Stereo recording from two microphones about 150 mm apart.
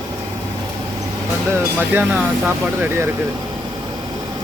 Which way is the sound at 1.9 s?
10° right (ahead or behind).